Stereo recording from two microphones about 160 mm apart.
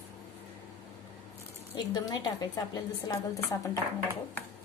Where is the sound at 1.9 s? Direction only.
25° left (ahead or behind).